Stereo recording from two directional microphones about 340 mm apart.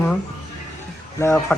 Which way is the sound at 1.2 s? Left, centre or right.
Centre.